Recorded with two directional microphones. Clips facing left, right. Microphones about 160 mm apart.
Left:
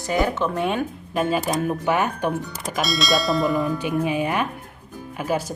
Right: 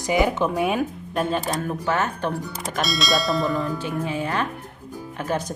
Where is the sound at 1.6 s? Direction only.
15° left (ahead or behind).